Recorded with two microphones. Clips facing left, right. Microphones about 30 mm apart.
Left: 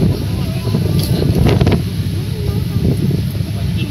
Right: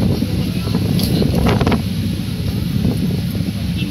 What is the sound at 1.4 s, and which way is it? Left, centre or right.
Wind noise, centre.